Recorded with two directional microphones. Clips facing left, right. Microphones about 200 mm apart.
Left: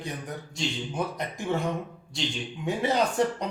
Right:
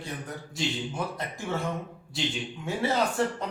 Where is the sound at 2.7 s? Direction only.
15° left (ahead or behind).